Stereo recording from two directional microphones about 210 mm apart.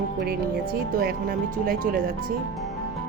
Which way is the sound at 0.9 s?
45° right (ahead or behind).